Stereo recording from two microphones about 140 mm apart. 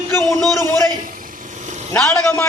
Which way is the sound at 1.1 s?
75° right (ahead or behind).